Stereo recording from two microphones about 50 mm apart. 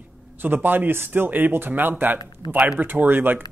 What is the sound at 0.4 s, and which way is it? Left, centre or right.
Speech, right.